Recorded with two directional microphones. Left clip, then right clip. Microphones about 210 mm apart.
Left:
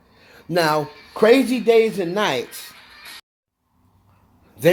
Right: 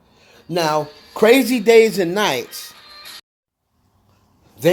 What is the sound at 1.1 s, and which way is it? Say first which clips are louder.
Speech: right 2 dB; 20° right (ahead or behind).